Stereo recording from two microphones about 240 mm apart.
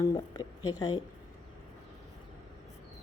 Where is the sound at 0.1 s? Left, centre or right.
Centre.